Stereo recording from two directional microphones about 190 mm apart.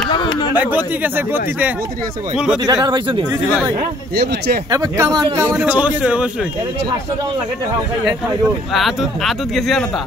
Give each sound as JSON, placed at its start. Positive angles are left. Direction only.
{"t": 0.1, "sound": "a sound", "side_deg": 25}
{"t": 1.0, "sound": "a man's voice", "side_deg": -10}
{"t": 2.6, "sound": "speech", "side_deg": -20}
{"t": 4.6, "sound": "a man's voice", "side_deg": -15}
{"t": 8.7, "sound": "speech", "side_deg": 0}